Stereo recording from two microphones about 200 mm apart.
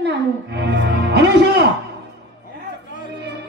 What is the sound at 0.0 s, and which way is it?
Music, 60° right (ahead or behind).